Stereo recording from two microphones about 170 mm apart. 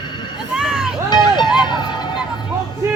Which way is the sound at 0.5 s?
5° right (ahead or behind).